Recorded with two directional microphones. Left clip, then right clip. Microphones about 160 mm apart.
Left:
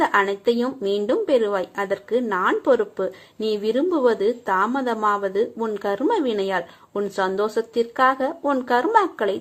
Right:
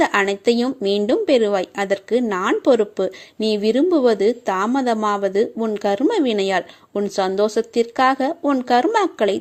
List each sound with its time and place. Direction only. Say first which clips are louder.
0.0 s speech: right 2 dB; 45° right (ahead or behind)